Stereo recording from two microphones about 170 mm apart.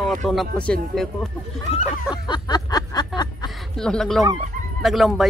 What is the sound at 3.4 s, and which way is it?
Honk, 5° left (ahead or behind).